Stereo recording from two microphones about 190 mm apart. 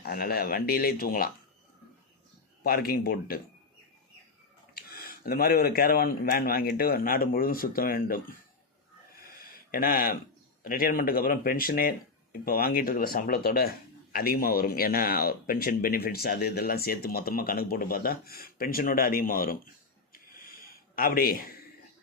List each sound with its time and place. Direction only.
0.0 s speech: 50° left (ahead or behind)
2.6 s speech: 50° left (ahead or behind)
4.7 s speech: 55° left (ahead or behind)
9.4 s a sound: 50° left (ahead or behind)
10.6 s speech: 50° left (ahead or behind)
20.1 s a sound: 50° left (ahead or behind)